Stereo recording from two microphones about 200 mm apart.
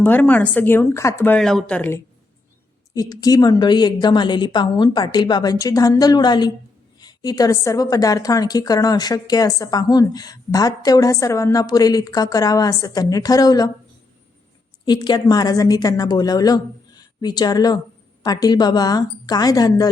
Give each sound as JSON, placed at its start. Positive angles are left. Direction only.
{"t": 0.0, "sound": "speech", "side_deg": 10}
{"t": 2.9, "sound": "a woman's voice", "side_deg": 20}
{"t": 14.8, "sound": "a woman's voice", "side_deg": 20}